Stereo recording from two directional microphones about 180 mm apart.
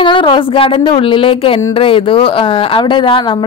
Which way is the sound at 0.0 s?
30° left (ahead or behind).